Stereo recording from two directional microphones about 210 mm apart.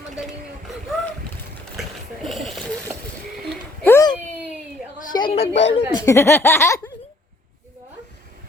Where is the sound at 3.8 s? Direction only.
15° left (ahead or behind).